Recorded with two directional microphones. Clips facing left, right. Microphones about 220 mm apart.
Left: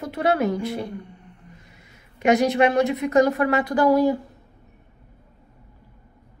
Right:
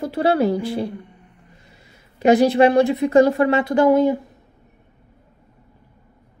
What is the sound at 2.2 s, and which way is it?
A woman's voice, 30° right (ahead or behind).